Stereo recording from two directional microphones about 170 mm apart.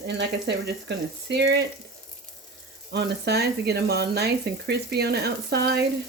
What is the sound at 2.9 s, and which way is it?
Speech, 75° right (ahead or behind).